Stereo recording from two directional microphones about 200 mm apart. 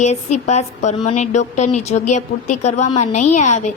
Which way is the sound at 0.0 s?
35° left (ahead or behind).